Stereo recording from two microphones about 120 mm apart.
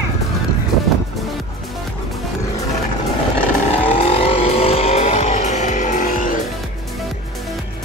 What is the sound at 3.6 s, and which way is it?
Vehicle, 55° left (ahead or behind).